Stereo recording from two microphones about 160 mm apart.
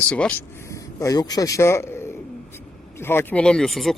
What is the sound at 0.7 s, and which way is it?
A man's voice, 20° left (ahead or behind).